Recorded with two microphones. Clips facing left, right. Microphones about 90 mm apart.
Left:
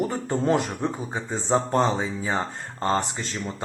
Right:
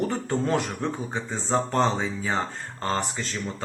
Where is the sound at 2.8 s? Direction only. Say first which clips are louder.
Left 3 dB; 20° left (ahead or behind).